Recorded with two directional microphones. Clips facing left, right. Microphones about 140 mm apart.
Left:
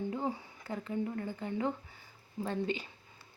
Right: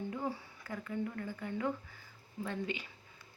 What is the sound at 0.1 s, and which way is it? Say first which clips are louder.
Speech: left 3 dB; 25° left (ahead or behind).